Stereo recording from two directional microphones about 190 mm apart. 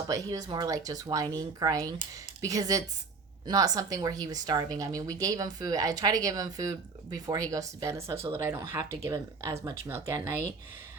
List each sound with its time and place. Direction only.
0.1 s a woman's voice: 20° right (ahead or behind)